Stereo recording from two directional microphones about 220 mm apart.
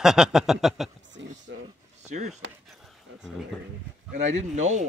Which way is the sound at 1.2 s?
55° right (ahead or behind).